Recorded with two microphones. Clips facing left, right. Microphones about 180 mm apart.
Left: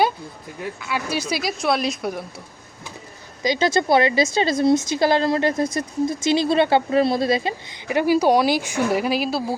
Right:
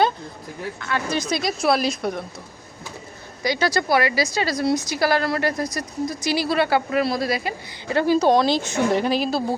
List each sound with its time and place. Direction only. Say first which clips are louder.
0.8 s speech: right 1 dB; 10° left (ahead or behind)
3.4 s a woman's voice: left 2 dB; 20° left (ahead or behind)
7.9 s a woman's voice: even; 10° left (ahead or behind)